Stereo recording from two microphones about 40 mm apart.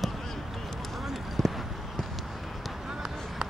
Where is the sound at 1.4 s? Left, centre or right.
Centre.